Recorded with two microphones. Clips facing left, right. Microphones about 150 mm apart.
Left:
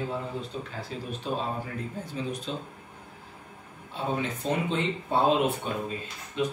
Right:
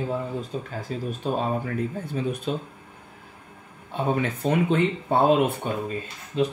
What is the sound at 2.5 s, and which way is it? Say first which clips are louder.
Speech: right 6 dB; 55° right (ahead or behind).